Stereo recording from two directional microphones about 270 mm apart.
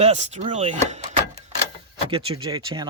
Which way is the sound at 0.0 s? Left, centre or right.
Right.